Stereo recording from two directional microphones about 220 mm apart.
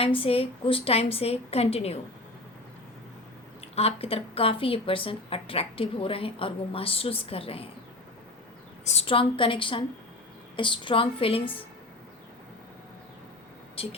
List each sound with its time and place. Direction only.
0.0 s a woman's voice: 25° left (ahead or behind)
3.8 s a woman's voice: 25° left (ahead or behind)
8.8 s a woman's voice: 30° left (ahead or behind)
13.8 s a woman's voice: 25° left (ahead or behind)